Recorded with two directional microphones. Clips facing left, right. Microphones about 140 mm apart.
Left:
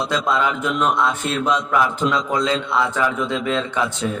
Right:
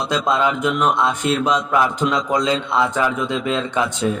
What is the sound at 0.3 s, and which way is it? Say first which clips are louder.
Speech: right 4 dB; 20° right (ahead or behind).